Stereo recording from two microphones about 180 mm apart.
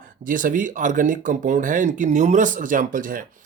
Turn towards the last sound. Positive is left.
turn(degrees=-50)  # may be behind; listen again after turning